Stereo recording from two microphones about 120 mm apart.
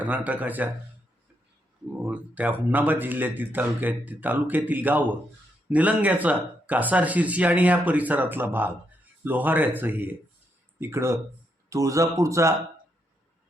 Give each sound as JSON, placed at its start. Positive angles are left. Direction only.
{"t": 0.0, "sound": "speech", "side_deg": -15}
{"t": 2.0, "sound": "speech", "side_deg": -10}